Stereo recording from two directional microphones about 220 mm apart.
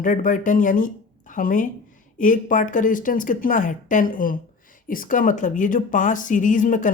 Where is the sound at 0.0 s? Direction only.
35° left (ahead or behind).